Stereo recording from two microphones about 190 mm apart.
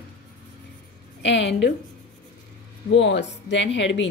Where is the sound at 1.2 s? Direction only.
65° left (ahead or behind).